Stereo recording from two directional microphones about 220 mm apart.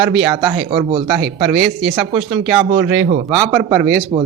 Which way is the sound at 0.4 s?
20° right (ahead or behind).